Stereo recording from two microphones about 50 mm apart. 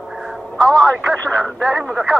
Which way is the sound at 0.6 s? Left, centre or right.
Centre.